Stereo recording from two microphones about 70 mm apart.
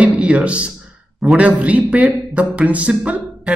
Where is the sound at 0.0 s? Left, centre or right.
Centre.